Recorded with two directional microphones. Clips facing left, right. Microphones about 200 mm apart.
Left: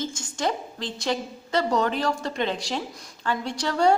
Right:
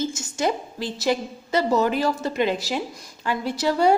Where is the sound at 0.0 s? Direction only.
5° right (ahead or behind).